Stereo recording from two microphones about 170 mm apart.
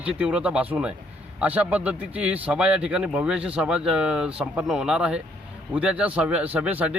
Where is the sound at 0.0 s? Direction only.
5° right (ahead or behind).